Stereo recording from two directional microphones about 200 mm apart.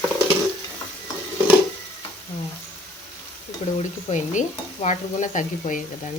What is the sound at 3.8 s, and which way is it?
A woman's voice, 35° left (ahead or behind).